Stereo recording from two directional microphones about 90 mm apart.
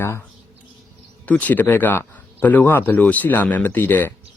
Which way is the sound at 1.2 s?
20° left (ahead or behind).